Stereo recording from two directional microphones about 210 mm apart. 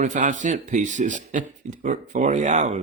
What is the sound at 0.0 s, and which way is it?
Speech, 35° right (ahead or behind).